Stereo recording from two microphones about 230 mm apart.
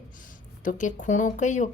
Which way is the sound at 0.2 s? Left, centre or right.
Left.